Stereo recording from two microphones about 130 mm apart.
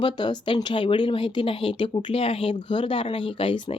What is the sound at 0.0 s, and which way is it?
A woman's voice, 35° left (ahead or behind).